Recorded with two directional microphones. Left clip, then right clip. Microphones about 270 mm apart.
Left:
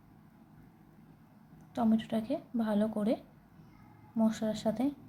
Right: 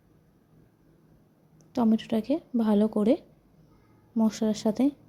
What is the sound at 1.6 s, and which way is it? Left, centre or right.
A woman's voice, right.